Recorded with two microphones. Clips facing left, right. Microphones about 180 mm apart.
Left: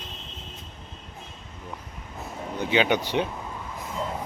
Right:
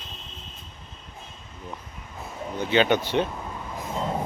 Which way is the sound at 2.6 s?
15° left (ahead or behind).